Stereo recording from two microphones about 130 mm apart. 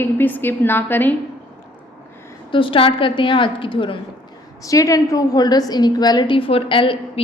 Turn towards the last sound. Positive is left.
turn(degrees=40)  # may be behind; listen again after turning